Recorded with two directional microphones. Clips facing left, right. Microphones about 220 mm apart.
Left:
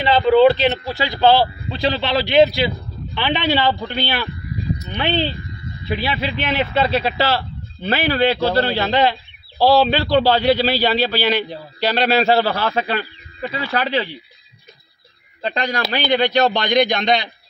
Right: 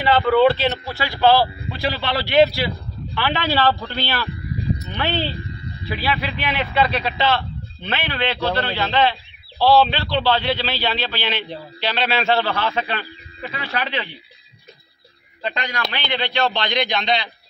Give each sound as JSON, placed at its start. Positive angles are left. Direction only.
{"t": 0.0, "sound": "a man's voice", "side_deg": 20}
{"t": 15.4, "sound": "a man's voice", "side_deg": 35}